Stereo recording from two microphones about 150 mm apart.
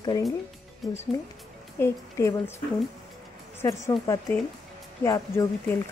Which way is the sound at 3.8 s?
20° left (ahead or behind).